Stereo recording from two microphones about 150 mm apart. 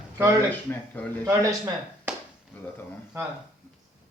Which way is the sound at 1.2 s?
20° right (ahead or behind).